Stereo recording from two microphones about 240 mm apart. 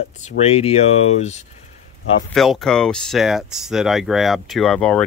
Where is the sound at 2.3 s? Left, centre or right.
Centre.